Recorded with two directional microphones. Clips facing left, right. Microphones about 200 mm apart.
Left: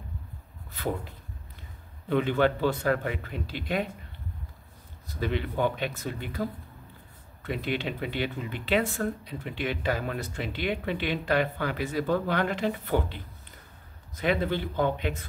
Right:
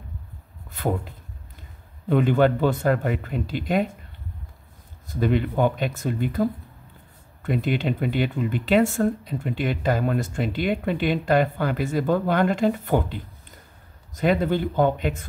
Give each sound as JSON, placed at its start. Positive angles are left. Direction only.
{"t": 0.7, "sound": "a sound", "side_deg": -45}
{"t": 2.0, "sound": "speech", "side_deg": -45}
{"t": 5.0, "sound": "speech", "side_deg": -50}
{"t": 7.4, "sound": "speech", "side_deg": -45}
{"t": 14.2, "sound": "speech", "side_deg": -45}